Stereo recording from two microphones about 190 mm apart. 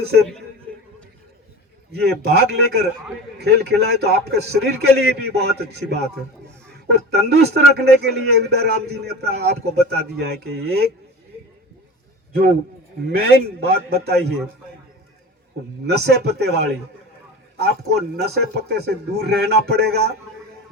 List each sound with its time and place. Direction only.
0.0 s a man's voice: 55° right (ahead or behind)
1.9 s a man's voice: 60° right (ahead or behind)
12.3 s a man's voice: 55° right (ahead or behind)
15.9 s a man's voice: 60° right (ahead or behind)